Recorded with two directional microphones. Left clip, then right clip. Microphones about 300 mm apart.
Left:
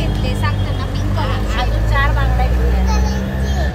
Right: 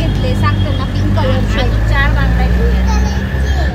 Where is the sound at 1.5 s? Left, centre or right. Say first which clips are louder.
Right 3 dB; left.